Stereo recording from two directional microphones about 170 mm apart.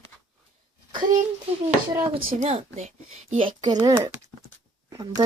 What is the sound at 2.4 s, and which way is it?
Speech, 40° right (ahead or behind).